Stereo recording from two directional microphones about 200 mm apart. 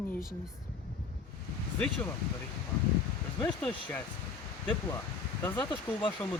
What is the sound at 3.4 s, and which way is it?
Speech, 5° left (ahead or behind).